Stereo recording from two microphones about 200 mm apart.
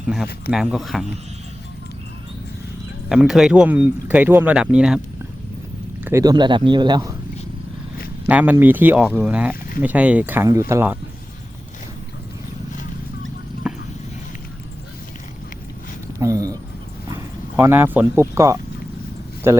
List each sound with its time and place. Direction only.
0.5 s speech: centre (ahead or behind)
3.1 s speech: 5° right (ahead or behind)
6.1 s a man's voice: 15° right (ahead or behind)
8.3 s speech: 5° right (ahead or behind)
16.1 s a sound: 15° right (ahead or behind)
17.6 s speech: 10° right (ahead or behind)